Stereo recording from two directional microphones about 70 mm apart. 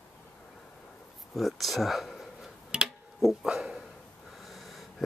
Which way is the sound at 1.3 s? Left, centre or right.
Centre.